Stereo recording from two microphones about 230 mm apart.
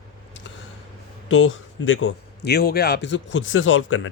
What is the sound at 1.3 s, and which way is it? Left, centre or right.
A man's voice, left.